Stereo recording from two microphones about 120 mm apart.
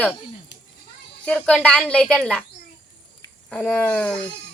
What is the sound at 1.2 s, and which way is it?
A woman's voice, 10° left (ahead or behind).